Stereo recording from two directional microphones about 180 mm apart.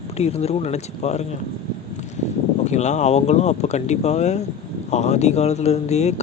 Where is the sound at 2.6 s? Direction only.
40° left (ahead or behind).